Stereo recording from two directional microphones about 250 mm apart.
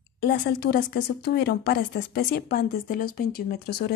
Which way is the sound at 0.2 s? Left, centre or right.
Left.